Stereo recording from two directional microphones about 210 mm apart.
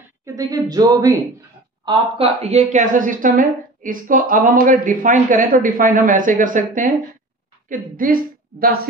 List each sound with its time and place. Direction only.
0.2 s speech: 15° right (ahead or behind)
1.9 s a woman's voice: 30° right (ahead or behind); by 8.7 s 45° right (ahead or behind)